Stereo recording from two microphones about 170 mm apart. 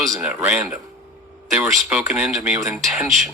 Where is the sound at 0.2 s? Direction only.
10° right (ahead or behind).